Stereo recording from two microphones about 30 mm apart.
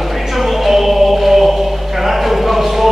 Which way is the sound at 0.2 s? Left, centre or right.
Centre.